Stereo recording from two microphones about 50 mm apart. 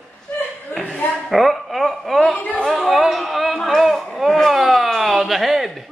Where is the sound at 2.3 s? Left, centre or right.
Left.